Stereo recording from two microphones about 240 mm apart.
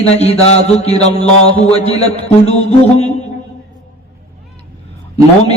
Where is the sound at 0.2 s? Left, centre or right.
Left.